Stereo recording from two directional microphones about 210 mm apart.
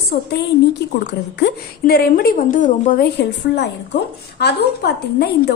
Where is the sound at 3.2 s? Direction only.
55° left (ahead or behind).